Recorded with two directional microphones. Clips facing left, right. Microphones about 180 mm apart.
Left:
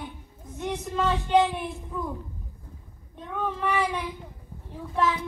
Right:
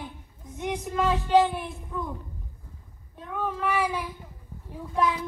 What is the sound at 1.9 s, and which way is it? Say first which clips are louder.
Speech: even; 5° left (ahead or behind).